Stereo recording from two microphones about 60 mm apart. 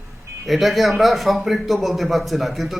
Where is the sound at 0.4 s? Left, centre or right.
Centre.